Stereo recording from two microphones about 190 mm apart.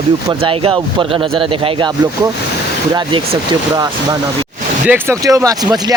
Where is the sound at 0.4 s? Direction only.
25° right (ahead or behind).